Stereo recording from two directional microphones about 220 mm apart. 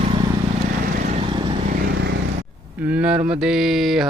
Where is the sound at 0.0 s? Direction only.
25° right (ahead or behind).